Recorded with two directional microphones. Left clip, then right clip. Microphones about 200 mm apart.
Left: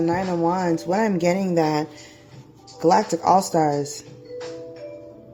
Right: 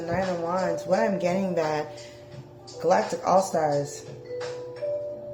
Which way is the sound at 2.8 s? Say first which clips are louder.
Left 5 dB; 40° left (ahead or behind).